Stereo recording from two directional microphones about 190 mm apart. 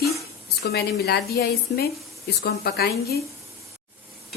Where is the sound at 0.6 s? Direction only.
60° left (ahead or behind).